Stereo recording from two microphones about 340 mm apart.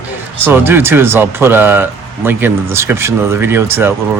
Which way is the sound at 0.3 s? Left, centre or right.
Centre.